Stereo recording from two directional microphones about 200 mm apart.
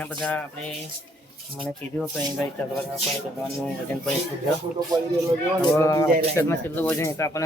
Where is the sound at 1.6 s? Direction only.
5° left (ahead or behind).